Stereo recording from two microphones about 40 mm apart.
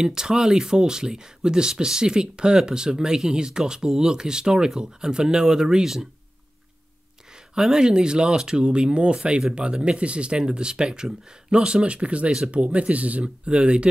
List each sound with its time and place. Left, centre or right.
0.0 s speech: centre
7.5 s speech: centre